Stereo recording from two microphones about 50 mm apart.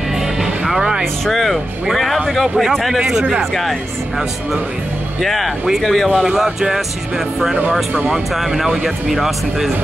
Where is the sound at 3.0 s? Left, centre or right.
Centre.